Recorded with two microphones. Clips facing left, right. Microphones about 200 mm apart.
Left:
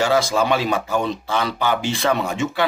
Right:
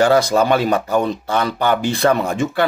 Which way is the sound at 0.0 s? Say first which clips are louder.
Right 4 dB; 55° right (ahead or behind).